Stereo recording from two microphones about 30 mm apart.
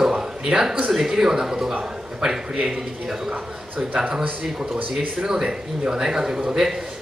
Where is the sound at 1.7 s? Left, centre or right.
Right.